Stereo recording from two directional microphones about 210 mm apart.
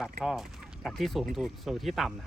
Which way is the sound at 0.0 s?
Centre (ahead or behind).